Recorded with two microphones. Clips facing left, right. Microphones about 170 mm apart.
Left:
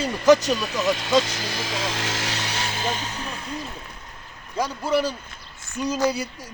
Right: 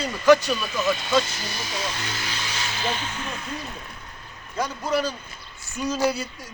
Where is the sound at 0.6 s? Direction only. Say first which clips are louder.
Left 1 dB; 90° left; by 3.4 s 35° left (ahead or behind).